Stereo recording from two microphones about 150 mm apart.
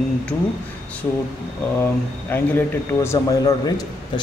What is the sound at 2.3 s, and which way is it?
Speech, 15° left (ahead or behind).